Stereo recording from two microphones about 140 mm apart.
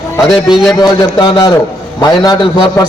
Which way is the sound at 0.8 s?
35° left (ahead or behind).